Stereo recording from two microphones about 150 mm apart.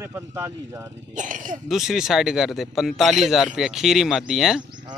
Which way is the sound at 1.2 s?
60° right (ahead or behind).